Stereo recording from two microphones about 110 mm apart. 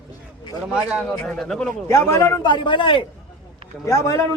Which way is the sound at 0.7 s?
10° right (ahead or behind).